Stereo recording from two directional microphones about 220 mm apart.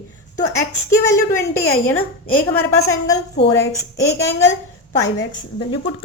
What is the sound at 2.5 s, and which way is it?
A woman's voice, 15° left (ahead or behind).